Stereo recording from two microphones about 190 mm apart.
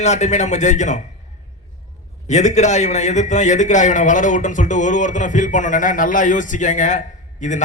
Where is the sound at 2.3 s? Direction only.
40° left (ahead or behind).